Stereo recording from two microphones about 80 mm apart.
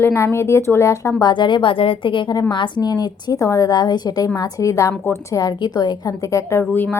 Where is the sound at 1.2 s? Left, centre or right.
Left.